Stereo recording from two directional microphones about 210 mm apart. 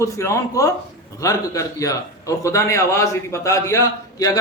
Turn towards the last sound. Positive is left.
turn(degrees=15)  # may be behind; listen again after turning